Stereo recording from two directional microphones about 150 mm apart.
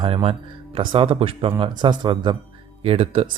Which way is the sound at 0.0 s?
40° right (ahead or behind).